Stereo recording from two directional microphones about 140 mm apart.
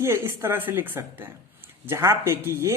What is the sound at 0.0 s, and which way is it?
Speech, 20° right (ahead or behind).